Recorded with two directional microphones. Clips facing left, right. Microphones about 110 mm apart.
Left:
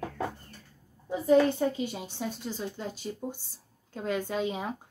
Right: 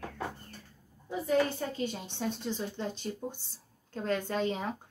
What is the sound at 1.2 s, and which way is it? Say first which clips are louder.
Speech: left 6 dB; 20° left (ahead or behind).